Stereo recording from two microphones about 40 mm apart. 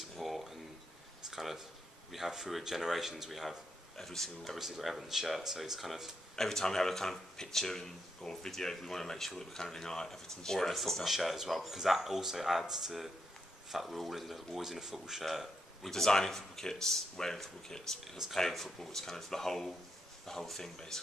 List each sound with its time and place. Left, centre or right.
0.2 s a sound: centre
1.3 s speech: centre
4.5 s speech: centre
6.3 s speech: centre
11.1 s speech: centre
15.2 s a sound: centre
15.9 s speech: centre